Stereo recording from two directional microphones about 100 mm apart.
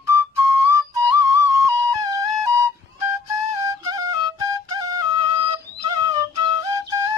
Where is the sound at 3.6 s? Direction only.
35° right (ahead or behind).